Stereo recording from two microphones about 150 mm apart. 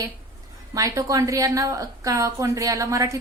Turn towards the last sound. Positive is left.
turn(degrees=-20)  # may be behind; listen again after turning